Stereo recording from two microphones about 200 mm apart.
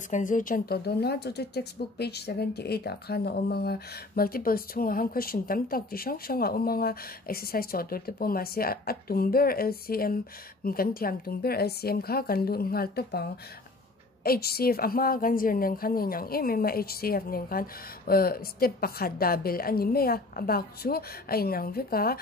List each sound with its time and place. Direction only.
0.1 s speech: 40° left (ahead or behind)